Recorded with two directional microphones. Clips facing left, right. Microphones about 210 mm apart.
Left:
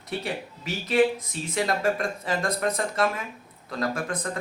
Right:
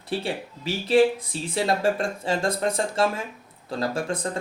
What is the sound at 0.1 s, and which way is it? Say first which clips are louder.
A woman's voice: right 3 dB; 30° right (ahead or behind).